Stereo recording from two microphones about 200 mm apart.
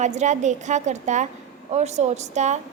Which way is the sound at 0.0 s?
35° right (ahead or behind).